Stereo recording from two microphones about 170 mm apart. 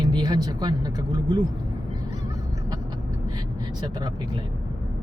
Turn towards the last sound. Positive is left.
turn(degrees=-25)  # may be behind; listen again after turning